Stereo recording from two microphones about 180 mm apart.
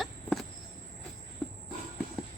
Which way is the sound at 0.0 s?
Centre (ahead or behind).